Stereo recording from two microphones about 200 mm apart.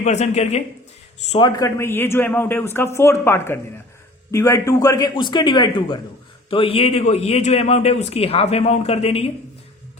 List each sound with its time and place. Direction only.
0.0 s a man's voice: 35° left (ahead or behind)